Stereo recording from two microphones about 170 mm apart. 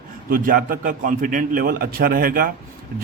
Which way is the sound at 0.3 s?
55° right (ahead or behind).